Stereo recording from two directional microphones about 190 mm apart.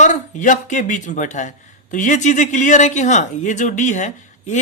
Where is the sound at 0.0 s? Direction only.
40° left (ahead or behind).